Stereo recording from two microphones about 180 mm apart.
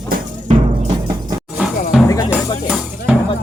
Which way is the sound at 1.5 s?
5° right (ahead or behind).